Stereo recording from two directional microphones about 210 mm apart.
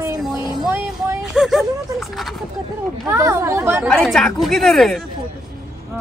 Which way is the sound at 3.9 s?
Centre (ahead or behind).